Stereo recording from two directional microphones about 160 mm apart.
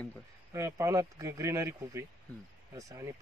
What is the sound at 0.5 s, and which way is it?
A man's voice, 20° right (ahead or behind).